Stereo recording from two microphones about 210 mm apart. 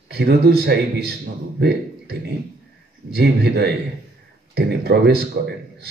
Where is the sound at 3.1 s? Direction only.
50° right (ahead or behind).